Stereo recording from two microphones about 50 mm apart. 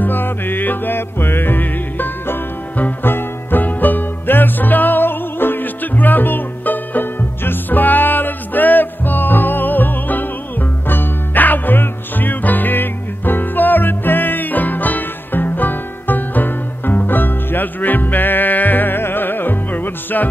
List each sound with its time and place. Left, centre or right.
0.0 s music: left